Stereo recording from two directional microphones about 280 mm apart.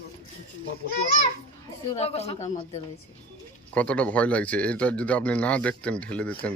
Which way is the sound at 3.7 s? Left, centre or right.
Centre.